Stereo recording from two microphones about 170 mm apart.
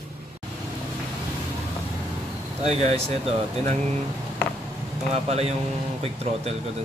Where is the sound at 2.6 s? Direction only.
40° right (ahead or behind).